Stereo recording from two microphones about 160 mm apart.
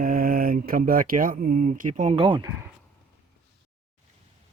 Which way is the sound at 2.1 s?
30° right (ahead or behind).